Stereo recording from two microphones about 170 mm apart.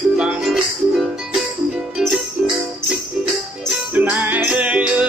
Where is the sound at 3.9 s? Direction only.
10° right (ahead or behind).